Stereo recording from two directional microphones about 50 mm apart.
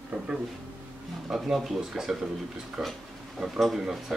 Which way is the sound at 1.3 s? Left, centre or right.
Centre.